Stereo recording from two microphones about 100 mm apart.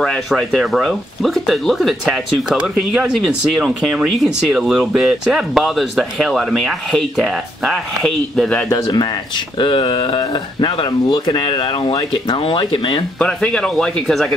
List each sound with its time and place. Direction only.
0.0 s speech: 5° left (ahead or behind)
8.0 s speech: 10° left (ahead or behind)
8.6 s speech: 40° left (ahead or behind); by 12.6 s 60° left (ahead or behind)
13.2 s speech: 10° left (ahead or behind)